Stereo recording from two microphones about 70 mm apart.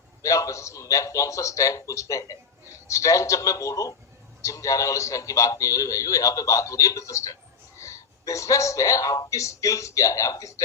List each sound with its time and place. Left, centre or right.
0.2 s a man's voice: left